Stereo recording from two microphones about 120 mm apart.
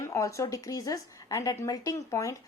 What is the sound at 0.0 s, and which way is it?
Speech, 25° left (ahead or behind).